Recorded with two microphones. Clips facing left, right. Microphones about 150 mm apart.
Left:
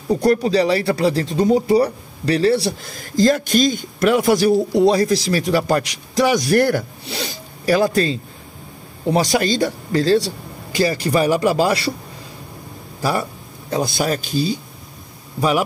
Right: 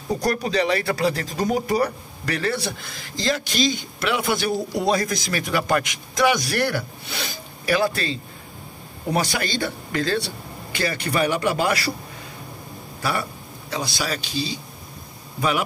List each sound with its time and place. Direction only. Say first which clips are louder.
0.2 s speech: left 7 dB; 30° left (ahead or behind)
6.5 s speech: left 8 dB; 45° left (ahead or behind)
7.1 s speech: left 4 dB; 30° left (ahead or behind)
13.7 s speech: left 7 dB; 50° left (ahead or behind)